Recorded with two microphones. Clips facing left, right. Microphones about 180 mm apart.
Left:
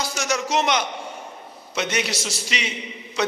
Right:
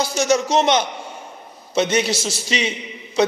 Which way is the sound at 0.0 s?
25° right (ahead or behind).